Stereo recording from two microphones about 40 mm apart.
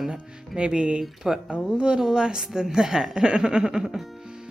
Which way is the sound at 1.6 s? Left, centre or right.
Right.